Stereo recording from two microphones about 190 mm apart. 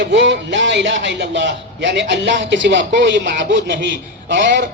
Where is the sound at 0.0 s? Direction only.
70° right (ahead or behind).